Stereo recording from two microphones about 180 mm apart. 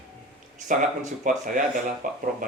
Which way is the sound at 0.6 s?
45° right (ahead or behind).